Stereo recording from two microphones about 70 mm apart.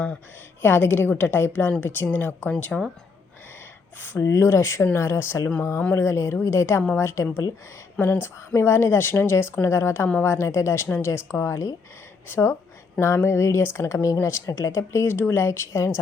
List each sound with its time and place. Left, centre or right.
0.6 s speech: left
4.2 s speech: left
12.3 s speech: left
13.1 s speech: left